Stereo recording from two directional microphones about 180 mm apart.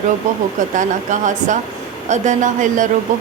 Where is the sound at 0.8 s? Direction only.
45° right (ahead or behind).